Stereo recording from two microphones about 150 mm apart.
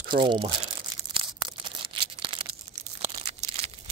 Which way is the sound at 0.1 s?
35° right (ahead or behind).